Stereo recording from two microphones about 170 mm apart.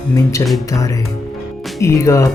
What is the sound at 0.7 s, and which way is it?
Music, 20° left (ahead or behind).